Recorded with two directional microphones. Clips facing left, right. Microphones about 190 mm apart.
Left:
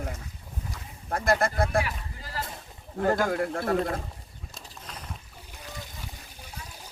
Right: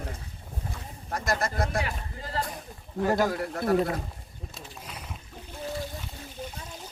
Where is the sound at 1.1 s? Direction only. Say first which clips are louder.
Left 4 dB; 55° left (ahead or behind).